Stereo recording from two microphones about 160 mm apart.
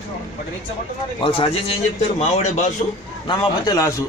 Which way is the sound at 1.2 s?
35° left (ahead or behind).